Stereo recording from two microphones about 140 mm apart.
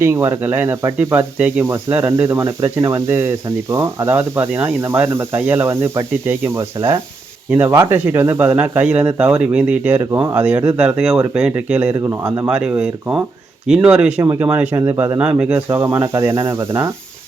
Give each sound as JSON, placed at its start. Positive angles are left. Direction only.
{"t": 0.0, "sound": "speech", "side_deg": -20}
{"t": 10.0, "sound": "speech", "side_deg": -20}
{"t": 11.9, "sound": "speech", "side_deg": -20}
{"t": 12.5, "sound": "speech", "side_deg": -5}
{"t": 14.2, "sound": "speech", "side_deg": -15}